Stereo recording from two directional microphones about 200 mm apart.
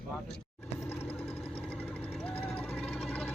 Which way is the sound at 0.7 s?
10° left (ahead or behind).